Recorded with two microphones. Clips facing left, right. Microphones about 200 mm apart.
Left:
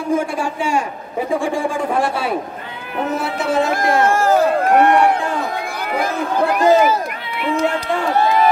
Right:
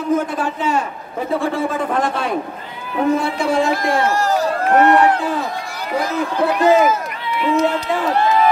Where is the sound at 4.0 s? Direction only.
50° left (ahead or behind).